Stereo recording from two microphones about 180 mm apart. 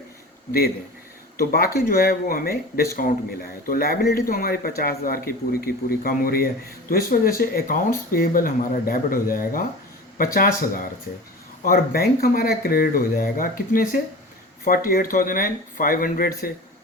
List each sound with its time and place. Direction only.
1.4 s a man's voice: 55° left (ahead or behind)